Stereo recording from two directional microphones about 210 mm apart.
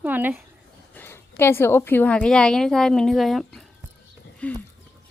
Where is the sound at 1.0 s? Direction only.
10° left (ahead or behind).